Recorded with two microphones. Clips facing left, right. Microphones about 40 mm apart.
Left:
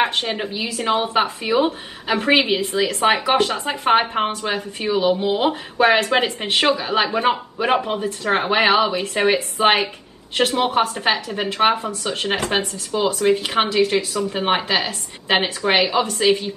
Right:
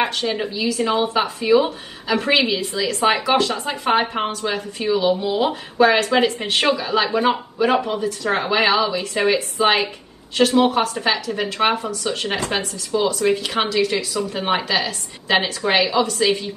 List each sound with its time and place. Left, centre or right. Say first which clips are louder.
0.0 s a woman's voice: left 1 dB; left